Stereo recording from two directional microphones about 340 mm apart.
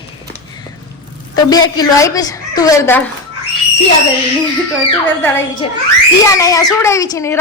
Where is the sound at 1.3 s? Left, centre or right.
Centre.